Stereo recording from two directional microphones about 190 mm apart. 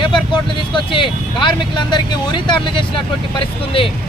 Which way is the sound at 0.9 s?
25° left (ahead or behind).